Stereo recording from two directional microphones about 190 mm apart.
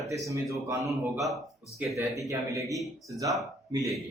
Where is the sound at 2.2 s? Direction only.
15° right (ahead or behind).